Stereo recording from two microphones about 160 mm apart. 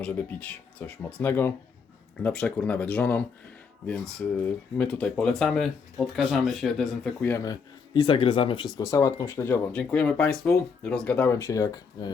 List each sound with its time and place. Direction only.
0.0 s speech: 10° left (ahead or behind)
4.8 s speech: 5° left (ahead or behind)
7.3 s speech: 15° left (ahead or behind)
7.9 s speech: 30° left (ahead or behind)